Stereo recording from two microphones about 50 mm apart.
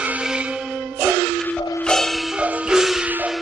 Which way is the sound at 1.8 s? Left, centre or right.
Centre.